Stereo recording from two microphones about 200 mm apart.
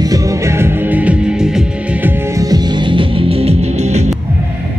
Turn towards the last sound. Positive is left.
turn(degrees=-35)  # may be behind; listen again after turning